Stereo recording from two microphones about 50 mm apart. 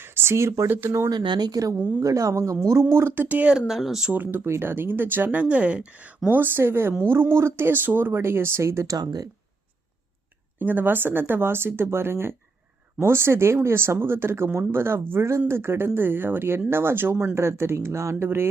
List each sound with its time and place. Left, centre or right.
0.0 s a sound: right
0.7 s speech: right
2.0 s speech: right
2.9 s speech: right
3.2 s speech: right
3.7 s speech: centre
4.1 s speech: right
4.4 s speech: right
4.7 s speech: right
10.6 s speech: right
16.0 s speech: right
17.3 s speech: right